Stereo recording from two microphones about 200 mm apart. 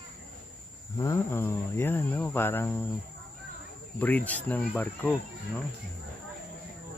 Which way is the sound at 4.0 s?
10° left (ahead or behind).